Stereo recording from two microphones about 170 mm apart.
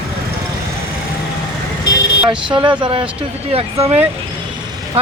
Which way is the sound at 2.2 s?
25° right (ahead or behind).